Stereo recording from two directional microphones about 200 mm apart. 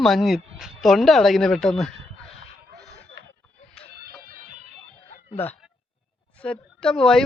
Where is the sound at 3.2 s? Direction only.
65° right (ahead or behind).